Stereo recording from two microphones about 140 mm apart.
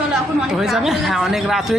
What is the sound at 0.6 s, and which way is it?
Speech, centre (ahead or behind).